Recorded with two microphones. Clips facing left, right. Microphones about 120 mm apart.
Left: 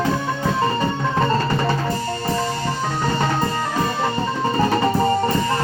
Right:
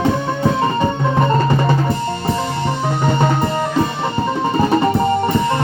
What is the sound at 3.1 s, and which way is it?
Music, 20° right (ahead or behind).